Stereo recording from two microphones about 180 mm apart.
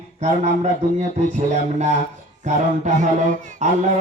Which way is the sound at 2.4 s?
45° right (ahead or behind).